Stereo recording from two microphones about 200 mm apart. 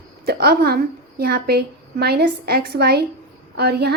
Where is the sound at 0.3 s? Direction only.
50° right (ahead or behind).